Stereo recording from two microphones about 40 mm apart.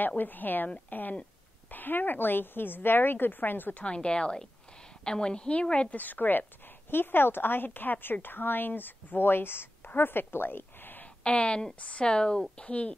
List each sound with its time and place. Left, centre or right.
0.0 s a woman's voice: left
3.7 s speech: left
5.9 s speech: left
6.9 s a woman's voice: left
11.2 s speech: left